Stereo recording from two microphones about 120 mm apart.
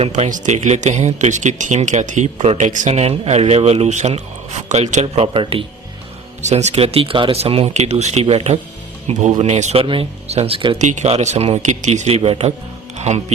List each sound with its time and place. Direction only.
0.1 s speech: 90° right; by 3.1 s 70° right (ahead or behind)
3.2 s a man's voice: 60° right (ahead or behind)
5.0 s speech: 55° right (ahead or behind)
6.4 s a man's voice: 70° right (ahead or behind)
9.8 s speech: 50° right (ahead or behind)
10.8 s speech: 85° right
11.1 s speech: 65° right (ahead or behind)
13.0 s speech: 70° right (ahead or behind)